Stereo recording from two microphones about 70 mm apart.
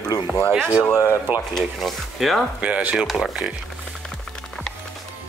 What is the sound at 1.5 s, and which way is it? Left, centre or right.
Speech, centre.